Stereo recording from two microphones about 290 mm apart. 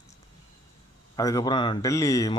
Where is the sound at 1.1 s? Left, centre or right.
Centre.